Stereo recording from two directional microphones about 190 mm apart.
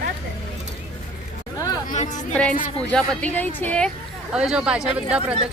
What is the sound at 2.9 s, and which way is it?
Speech, 5° left (ahead or behind).